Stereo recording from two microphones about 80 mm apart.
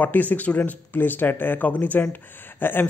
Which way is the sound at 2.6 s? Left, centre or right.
Left.